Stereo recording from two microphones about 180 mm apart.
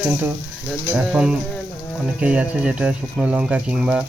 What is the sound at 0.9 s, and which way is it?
Speech, 5° right (ahead or behind).